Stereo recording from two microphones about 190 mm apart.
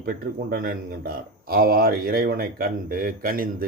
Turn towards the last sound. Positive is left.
turn(degrees=-50)  # may be behind; listen again after turning